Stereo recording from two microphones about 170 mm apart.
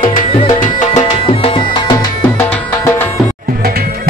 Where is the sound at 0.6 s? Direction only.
50° left (ahead or behind).